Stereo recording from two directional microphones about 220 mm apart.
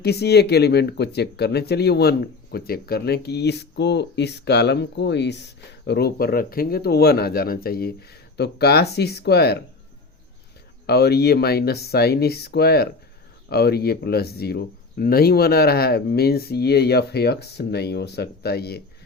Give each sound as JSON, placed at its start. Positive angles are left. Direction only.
{"t": 0.0, "sound": "speech", "side_deg": 45}
{"t": 10.8, "sound": "speech", "side_deg": 50}